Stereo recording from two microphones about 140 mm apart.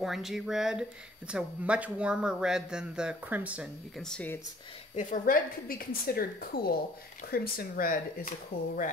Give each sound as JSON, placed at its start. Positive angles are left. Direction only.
{"t": 0.0, "sound": "a man's voice", "side_deg": 0}
{"t": 4.0, "sound": "speech", "side_deg": 5}
{"t": 4.9, "sound": "a woman's voice", "side_deg": 75}